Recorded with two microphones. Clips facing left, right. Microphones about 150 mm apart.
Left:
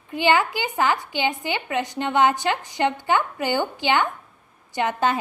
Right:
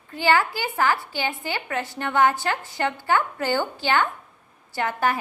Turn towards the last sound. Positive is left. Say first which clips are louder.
# left 2 dB
turn(degrees=20)  # may be behind; listen again after turning